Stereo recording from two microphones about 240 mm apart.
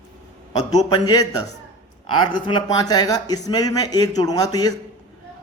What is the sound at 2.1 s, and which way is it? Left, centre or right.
A man's voice, centre.